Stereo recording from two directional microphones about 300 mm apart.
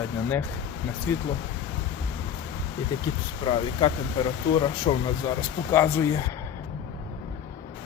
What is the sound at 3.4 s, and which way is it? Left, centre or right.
Speech, centre.